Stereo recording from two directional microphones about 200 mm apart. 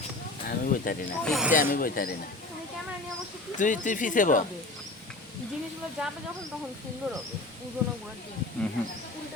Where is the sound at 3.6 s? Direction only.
40° left (ahead or behind).